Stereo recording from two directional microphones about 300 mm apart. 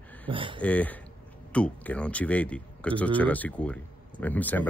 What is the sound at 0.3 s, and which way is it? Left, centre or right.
Speech, centre.